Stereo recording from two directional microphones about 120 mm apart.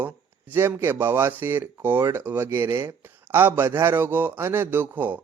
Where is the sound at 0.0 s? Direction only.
15° right (ahead or behind).